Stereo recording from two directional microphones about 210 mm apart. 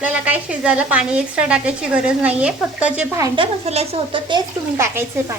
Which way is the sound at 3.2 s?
25° right (ahead or behind).